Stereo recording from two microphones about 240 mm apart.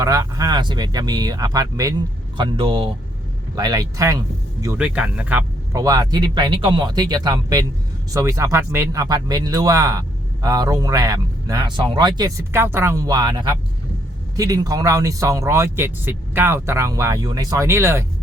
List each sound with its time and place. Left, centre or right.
0.0 s speech: centre